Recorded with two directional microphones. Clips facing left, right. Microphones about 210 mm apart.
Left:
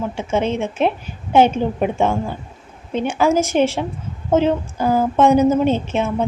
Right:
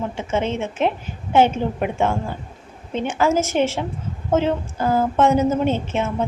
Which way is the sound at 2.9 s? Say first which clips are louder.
Left 2 dB; 15° left (ahead or behind).